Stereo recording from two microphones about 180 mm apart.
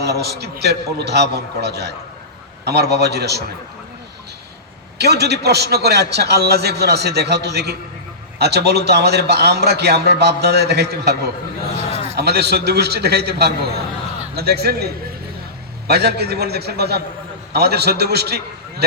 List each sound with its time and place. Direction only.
0.0 s a man's voice: 65° right (ahead or behind)
4.9 s a man's voice: 65° right (ahead or behind)
15.9 s a man's voice: 65° right (ahead or behind)